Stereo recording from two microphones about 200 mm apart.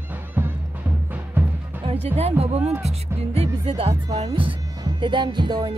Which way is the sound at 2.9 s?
30° right (ahead or behind).